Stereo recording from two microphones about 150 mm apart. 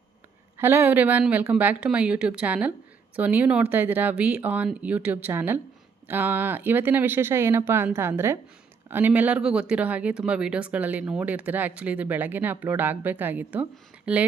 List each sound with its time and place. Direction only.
0.5 s speech: 15° right (ahead or behind)